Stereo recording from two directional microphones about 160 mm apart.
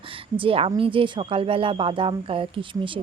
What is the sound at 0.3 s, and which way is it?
Speech, 35° right (ahead or behind).